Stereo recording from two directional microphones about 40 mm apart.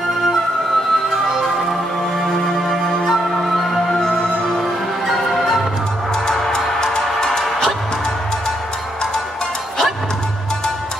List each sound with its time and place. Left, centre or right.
2.2 s music: centre
4.1 s music: left
5.0 s music: centre
6.7 s music: centre